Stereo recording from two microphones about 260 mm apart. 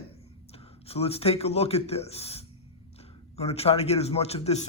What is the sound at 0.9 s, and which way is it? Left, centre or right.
Speech, left.